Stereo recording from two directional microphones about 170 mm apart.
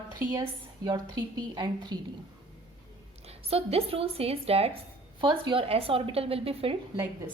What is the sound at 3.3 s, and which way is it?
A woman's voice, 35° right (ahead or behind).